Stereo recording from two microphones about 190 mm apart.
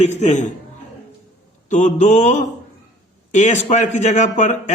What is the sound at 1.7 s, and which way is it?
A man's voice, 40° left (ahead or behind).